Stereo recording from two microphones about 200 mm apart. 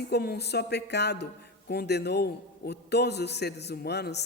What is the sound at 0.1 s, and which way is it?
A woman's voice, 55° left (ahead or behind).